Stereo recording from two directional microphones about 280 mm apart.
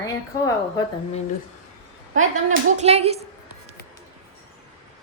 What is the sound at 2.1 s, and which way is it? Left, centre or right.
A woman's voice, right.